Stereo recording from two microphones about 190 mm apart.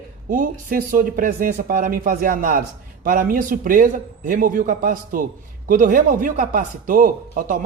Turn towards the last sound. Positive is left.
turn(degrees=-45)  # may be behind; listen again after turning